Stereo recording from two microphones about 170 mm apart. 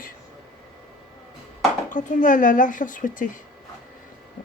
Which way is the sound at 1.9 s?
50° left (ahead or behind).